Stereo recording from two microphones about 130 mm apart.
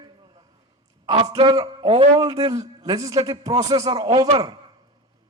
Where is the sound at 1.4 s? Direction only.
30° right (ahead or behind).